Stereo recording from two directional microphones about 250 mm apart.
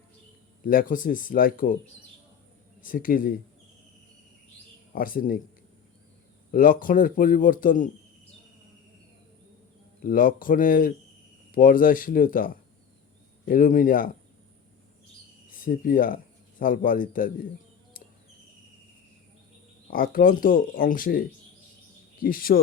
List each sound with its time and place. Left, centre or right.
0.6 s a man's voice: left
2.8 s a man's voice: left
4.9 s a man's voice: left
6.5 s a man's voice: left
10.0 s a man's voice: left
15.6 s speech: left
19.9 s a man's voice: left